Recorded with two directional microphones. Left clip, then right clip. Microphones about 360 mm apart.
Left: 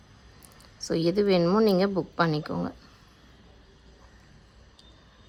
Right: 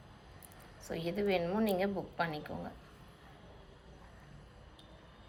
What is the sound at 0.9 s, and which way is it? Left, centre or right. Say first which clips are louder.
Speech: left 13 dB; centre.